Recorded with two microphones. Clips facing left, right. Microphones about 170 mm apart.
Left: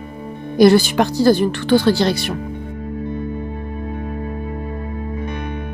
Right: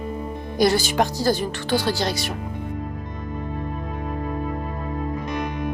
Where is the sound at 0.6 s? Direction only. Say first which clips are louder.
Left 8 dB; 60° left (ahead or behind).